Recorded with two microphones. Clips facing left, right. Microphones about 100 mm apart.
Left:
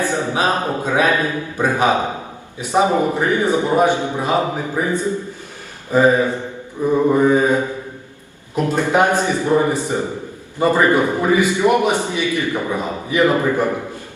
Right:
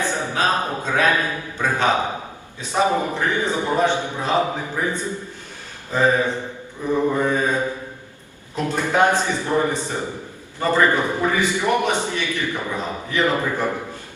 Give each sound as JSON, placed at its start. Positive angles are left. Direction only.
{"t": 0.1, "sound": "a man's voice", "side_deg": 15}